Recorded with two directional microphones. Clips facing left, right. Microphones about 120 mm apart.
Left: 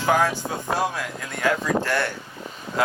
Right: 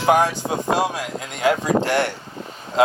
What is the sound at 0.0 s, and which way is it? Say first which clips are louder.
Speech: right 4 dB; 20° right (ahead or behind).